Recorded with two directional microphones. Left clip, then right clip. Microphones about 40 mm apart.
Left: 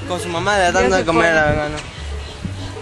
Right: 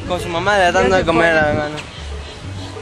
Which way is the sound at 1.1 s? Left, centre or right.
Centre.